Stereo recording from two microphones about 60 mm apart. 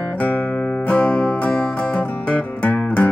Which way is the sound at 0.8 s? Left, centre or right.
Left.